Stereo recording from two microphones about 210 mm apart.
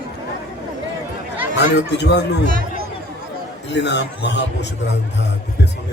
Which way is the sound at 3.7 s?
55° left (ahead or behind).